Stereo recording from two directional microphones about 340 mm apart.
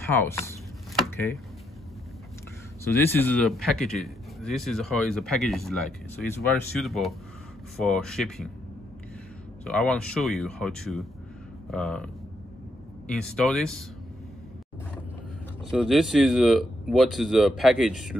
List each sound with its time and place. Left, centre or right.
0.0 s a sound: centre
2.8 s a man's voice: centre
9.7 s a man's voice: centre
13.1 s a man's voice: centre
15.7 s a man's voice: centre